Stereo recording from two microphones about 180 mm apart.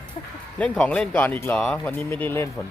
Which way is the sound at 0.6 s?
5° left (ahead or behind).